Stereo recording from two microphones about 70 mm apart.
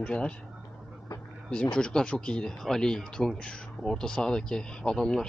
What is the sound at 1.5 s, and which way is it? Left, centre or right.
Speech, centre.